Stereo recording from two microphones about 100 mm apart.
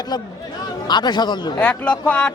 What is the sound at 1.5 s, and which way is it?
Speech, 10° left (ahead or behind).